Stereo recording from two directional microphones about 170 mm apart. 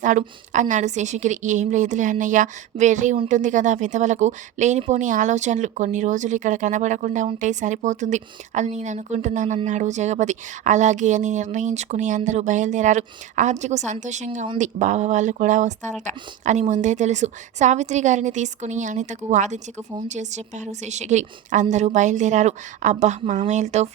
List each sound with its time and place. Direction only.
0.0 s speech: 45° right (ahead or behind)
14.6 s speech: 45° right (ahead or behind)